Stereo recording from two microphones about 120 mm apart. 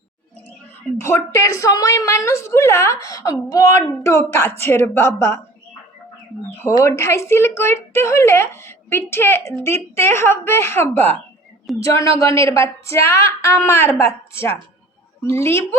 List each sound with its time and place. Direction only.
1.0 s speech: 25° left (ahead or behind)
6.7 s speech: 25° left (ahead or behind)
11.8 s speech: 25° left (ahead or behind)